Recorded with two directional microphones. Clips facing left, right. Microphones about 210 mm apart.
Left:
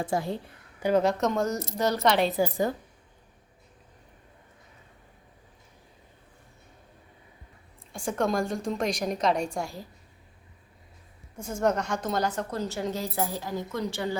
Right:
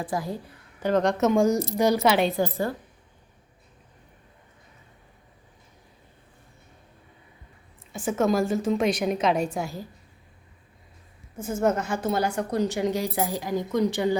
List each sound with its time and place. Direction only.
0.0 s a woman's voice: 25° left (ahead or behind)
0.8 s a woman's voice: 10° left (ahead or behind)
1.2 s a woman's voice: 10° right (ahead or behind)
7.9 s a woman's voice: 5° right (ahead or behind)
11.3 s a woman's voice: 5° right (ahead or behind)